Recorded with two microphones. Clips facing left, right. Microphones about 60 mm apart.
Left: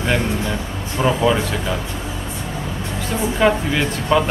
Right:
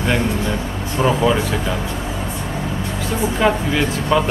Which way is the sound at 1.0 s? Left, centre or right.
Centre.